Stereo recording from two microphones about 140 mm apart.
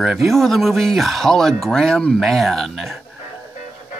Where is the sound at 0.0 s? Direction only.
Centre (ahead or behind).